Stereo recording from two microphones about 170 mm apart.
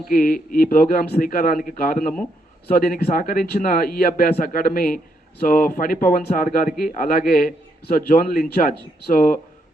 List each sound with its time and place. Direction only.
0.1 s a man's voice: 55° left (ahead or behind)